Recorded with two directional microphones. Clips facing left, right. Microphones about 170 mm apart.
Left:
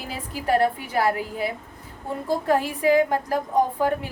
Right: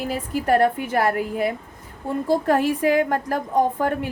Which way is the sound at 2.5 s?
50° right (ahead or behind).